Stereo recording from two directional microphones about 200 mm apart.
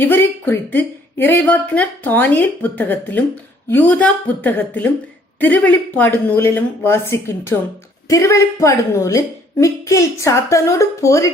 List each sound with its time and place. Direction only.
0.0 s speech: 10° left (ahead or behind)